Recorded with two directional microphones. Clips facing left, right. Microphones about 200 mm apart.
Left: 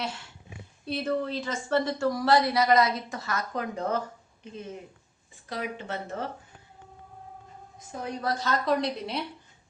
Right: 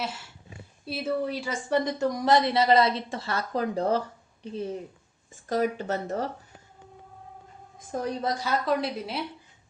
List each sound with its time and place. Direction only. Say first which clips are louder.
0.9 s speech: even; 5° right (ahead or behind); by 6.3 s 40° right (ahead or behind)
7.8 s a woman's voice: right 7 dB; 50° right (ahead or behind)
8.2 s a woman's voice: even; 15° right (ahead or behind)
8.6 s a woman's voice: even; 5° right (ahead or behind)